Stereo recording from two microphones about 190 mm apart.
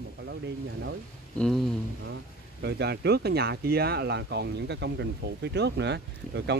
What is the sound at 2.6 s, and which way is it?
Speech, 60° right (ahead or behind).